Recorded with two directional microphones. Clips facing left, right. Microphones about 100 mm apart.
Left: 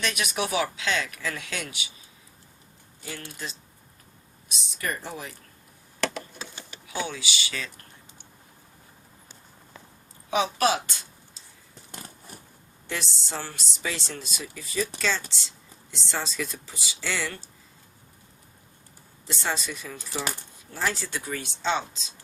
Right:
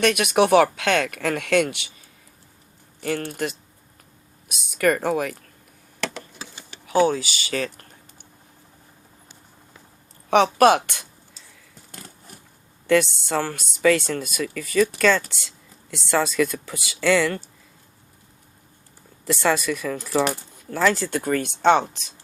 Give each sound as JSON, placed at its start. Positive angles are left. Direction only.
{"t": 0.0, "sound": "speech", "side_deg": -55}
{"t": 3.0, "sound": "speech", "side_deg": -55}
{"t": 6.9, "sound": "speech", "side_deg": -45}
{"t": 10.2, "sound": "speech", "side_deg": -65}
{"t": 12.9, "sound": "speech", "side_deg": -60}
{"t": 19.3, "sound": "speech", "side_deg": -60}
{"t": 20.9, "sound": "speech", "side_deg": -50}